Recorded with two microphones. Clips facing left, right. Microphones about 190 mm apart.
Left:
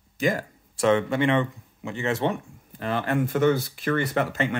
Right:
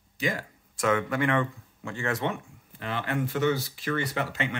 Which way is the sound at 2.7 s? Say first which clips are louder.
Left 5 dB; 45° left (ahead or behind).